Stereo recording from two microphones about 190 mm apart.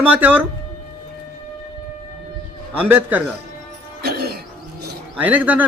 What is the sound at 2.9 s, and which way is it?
Speech, 10° right (ahead or behind).